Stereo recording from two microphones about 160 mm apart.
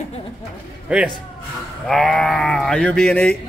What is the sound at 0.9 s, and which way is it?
Speech, 5° right (ahead or behind).